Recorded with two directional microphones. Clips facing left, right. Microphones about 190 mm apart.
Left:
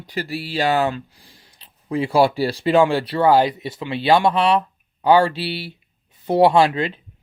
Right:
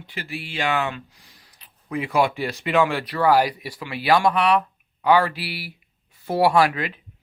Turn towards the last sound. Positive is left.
turn(degrees=25)  # may be behind; listen again after turning